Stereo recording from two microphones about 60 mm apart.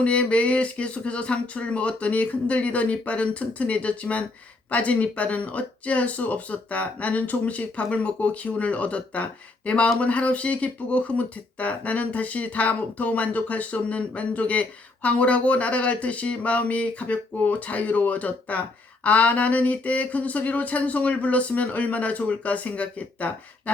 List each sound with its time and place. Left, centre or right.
0.0 s speech: centre